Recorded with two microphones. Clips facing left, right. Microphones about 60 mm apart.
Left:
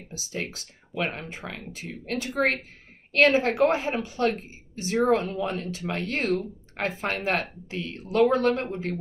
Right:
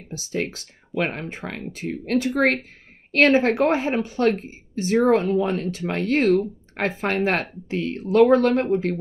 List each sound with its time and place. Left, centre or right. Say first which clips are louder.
0.1 s speech: right 7 dB; right